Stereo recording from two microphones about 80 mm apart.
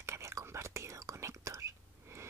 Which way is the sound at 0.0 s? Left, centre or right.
Right.